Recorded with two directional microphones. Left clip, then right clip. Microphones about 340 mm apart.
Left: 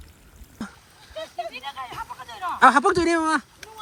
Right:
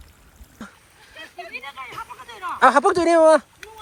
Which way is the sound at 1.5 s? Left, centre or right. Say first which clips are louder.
Even; left.